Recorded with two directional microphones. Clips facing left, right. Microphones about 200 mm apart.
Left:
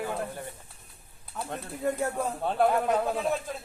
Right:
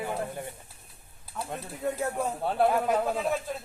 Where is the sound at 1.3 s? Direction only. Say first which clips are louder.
Left 1 dB; centre (ahead or behind).